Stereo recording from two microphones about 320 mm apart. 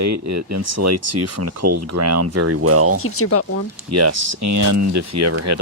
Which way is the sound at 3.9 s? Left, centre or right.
Right.